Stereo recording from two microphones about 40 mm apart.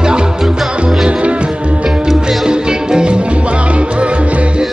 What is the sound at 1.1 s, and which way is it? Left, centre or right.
Music, right.